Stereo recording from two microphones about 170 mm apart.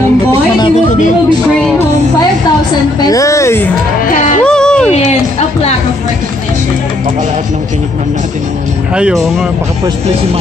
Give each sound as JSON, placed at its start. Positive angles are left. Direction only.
{"t": 0.3, "sound": "music", "side_deg": 25}
{"t": 3.1, "sound": "speech", "side_deg": 20}
{"t": 4.5, "sound": "a sound", "side_deg": 5}
{"t": 8.9, "sound": "speech", "side_deg": -5}